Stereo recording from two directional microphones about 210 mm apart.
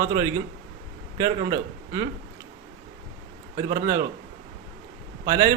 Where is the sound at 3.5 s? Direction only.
15° right (ahead or behind).